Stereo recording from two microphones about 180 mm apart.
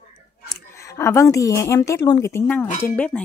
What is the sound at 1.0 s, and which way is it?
Speech, 15° left (ahead or behind).